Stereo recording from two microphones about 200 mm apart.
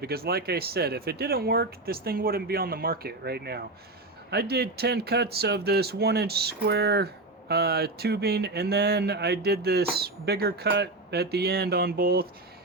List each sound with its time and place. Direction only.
0.0 s speech: 50° right (ahead or behind)